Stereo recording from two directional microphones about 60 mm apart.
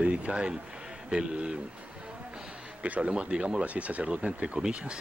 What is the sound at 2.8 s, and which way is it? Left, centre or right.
Speech, right.